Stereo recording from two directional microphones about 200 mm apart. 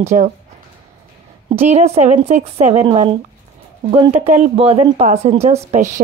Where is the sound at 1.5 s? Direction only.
30° right (ahead or behind).